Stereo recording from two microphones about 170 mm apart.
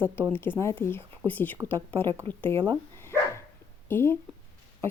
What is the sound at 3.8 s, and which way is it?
Speech, 15° left (ahead or behind).